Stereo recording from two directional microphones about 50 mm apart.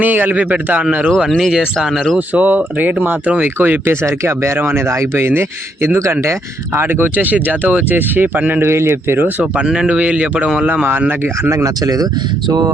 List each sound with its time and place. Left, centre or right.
0.0 s speech: right
1.3 s speech: centre
1.5 s speech: centre
2.1 s speech: right
4.0 s speech: right
8.6 s speech: right
9.2 s speech: right
9.6 s speech: centre
9.9 s speech: right